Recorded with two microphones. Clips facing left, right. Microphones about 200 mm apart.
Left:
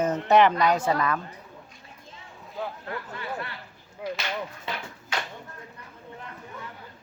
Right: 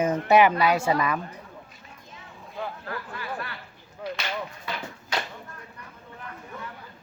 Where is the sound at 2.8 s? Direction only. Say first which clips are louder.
Even; 25° left (ahead or behind).